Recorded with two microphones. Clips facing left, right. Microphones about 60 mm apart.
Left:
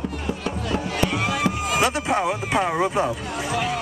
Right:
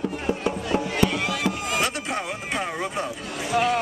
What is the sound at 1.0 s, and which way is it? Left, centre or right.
Music, centre.